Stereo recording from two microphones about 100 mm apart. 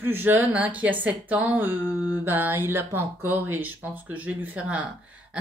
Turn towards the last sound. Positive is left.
turn(degrees=-10)  # may be behind; listen again after turning